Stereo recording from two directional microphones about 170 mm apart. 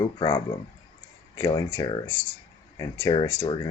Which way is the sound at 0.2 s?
25° left (ahead or behind).